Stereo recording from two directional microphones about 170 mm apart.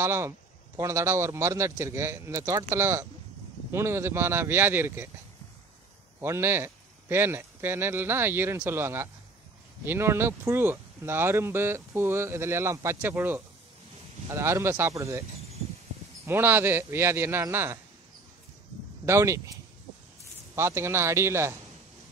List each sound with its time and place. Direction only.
0.0 s speech: 15° right (ahead or behind)
6.2 s speech: 15° right (ahead or behind)
16.3 s speech: 15° right (ahead or behind)
19.0 s speech: 15° right (ahead or behind)
20.5 s speech: 15° right (ahead or behind)